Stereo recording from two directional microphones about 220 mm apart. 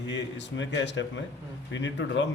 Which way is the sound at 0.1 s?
55° left (ahead or behind).